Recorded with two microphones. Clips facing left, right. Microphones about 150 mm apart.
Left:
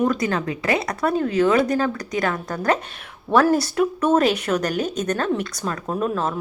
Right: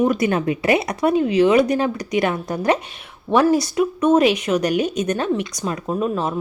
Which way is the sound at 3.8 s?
10° right (ahead or behind).